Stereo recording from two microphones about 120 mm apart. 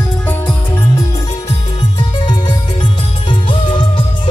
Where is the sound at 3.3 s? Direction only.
45° left (ahead or behind).